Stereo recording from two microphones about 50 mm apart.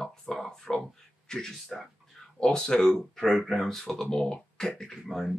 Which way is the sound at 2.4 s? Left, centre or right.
Centre.